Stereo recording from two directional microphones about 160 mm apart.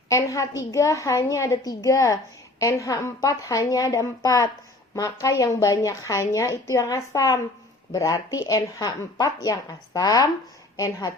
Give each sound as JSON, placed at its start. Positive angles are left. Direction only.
{"t": 0.1, "sound": "speech", "side_deg": 20}